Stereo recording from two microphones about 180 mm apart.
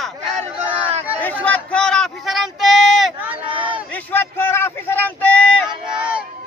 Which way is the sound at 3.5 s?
30° right (ahead or behind).